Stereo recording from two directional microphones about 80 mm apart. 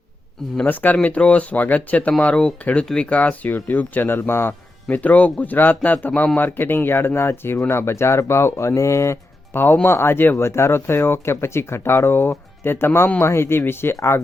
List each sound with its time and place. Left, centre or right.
0.5 s speech: centre; by 14.2 s left